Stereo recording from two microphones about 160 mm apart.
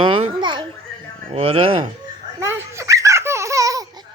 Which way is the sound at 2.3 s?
15° right (ahead or behind).